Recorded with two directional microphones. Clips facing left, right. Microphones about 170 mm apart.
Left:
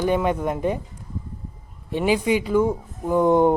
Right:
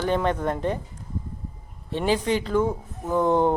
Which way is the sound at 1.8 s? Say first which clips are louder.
Left 3 dB; 10° left (ahead or behind).